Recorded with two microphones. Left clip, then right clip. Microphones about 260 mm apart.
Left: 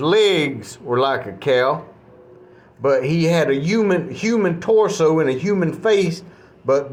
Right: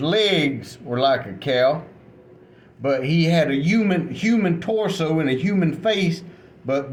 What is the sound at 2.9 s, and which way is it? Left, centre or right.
Speech, centre.